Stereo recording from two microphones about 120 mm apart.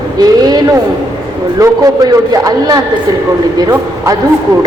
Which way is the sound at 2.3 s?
30° right (ahead or behind).